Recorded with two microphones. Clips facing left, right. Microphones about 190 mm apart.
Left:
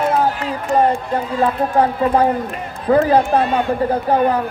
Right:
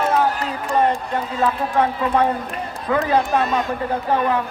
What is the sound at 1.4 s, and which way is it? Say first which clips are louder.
Speech: left 3 dB; 35° left (ahead or behind).